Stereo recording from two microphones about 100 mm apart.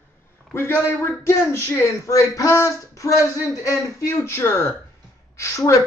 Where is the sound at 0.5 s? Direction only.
20° left (ahead or behind).